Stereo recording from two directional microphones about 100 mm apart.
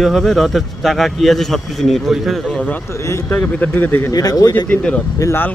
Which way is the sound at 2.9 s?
30° left (ahead or behind).